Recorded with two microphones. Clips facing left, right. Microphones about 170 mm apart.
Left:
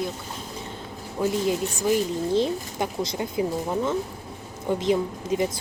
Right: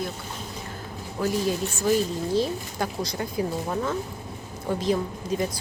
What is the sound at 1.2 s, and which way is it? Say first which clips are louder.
Speech: left 1 dB; 20° left (ahead or behind).